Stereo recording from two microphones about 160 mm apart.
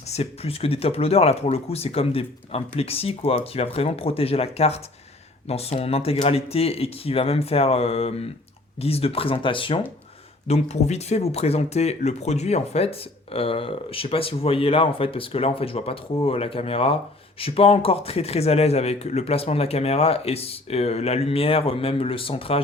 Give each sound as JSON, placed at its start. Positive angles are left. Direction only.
{"t": 0.1, "sound": "speech", "side_deg": 40}
{"t": 10.4, "sound": "speech", "side_deg": 45}